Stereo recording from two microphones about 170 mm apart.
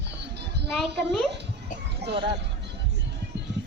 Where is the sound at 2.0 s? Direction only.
75° right (ahead or behind).